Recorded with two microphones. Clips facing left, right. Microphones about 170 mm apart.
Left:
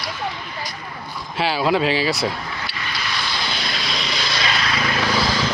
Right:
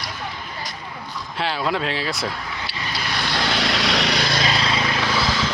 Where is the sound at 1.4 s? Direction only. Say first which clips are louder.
Left 5 dB; 5° left (ahead or behind).